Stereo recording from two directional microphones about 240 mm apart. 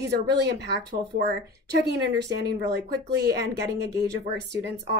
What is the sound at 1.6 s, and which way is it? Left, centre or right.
Speech, right.